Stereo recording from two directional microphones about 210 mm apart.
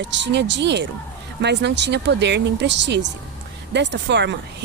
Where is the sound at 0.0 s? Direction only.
55° right (ahead or behind).